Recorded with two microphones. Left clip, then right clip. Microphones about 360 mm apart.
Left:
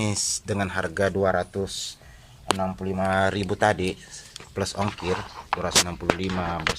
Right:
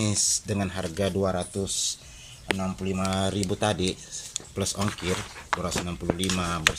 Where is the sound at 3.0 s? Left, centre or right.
Left.